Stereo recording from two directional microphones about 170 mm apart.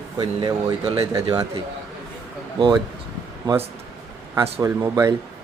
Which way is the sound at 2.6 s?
25° right (ahead or behind).